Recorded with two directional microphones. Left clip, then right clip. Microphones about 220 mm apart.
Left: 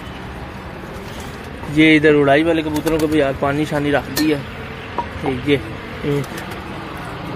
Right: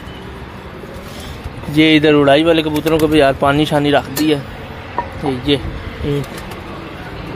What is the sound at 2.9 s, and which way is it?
Speech, 25° right (ahead or behind).